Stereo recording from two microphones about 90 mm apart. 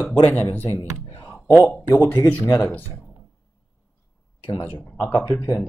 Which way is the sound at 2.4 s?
30° left (ahead or behind).